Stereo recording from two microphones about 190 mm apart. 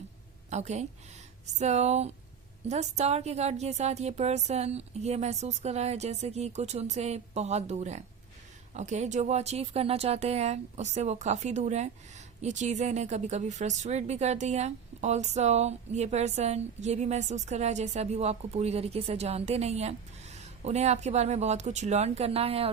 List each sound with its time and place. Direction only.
0.5 s speech: 35° right (ahead or behind)